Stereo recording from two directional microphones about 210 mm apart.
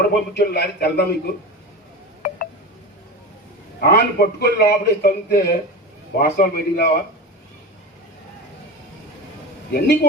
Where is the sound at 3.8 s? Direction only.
50° left (ahead or behind).